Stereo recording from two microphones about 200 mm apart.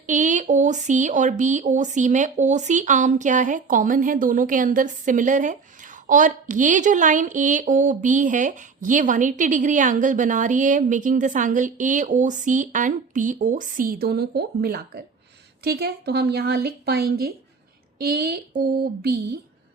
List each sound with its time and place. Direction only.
0.0 s a woman's voice: 40° right (ahead or behind)